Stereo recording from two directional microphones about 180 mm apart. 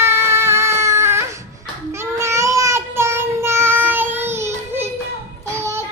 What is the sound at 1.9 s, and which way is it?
Child singing, 15° right (ahead or behind).